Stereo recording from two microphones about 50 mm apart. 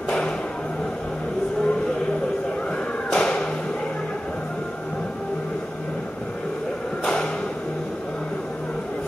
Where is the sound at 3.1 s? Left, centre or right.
Centre.